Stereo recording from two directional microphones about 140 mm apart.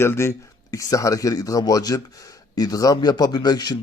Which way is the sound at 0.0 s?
20° left (ahead or behind).